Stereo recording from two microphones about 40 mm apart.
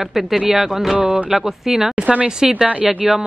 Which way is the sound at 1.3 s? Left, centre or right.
Centre.